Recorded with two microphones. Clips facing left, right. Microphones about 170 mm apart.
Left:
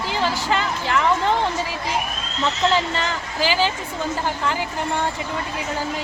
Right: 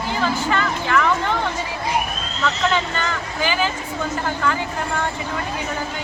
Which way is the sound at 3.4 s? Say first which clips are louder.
Left 2 dB; 30° left (ahead or behind).